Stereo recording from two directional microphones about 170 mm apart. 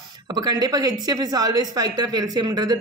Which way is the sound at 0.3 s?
25° right (ahead or behind).